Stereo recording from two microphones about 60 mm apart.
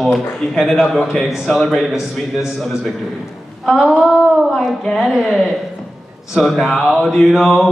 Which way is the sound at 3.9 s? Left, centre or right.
Centre.